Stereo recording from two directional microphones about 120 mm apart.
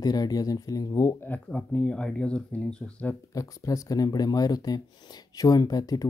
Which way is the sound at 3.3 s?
30° left (ahead or behind).